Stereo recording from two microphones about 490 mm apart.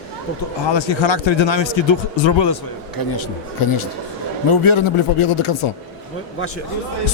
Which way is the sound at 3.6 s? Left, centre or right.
Left.